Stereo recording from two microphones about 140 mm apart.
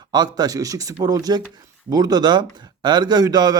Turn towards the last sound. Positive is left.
turn(degrees=-30)  # may be behind; listen again after turning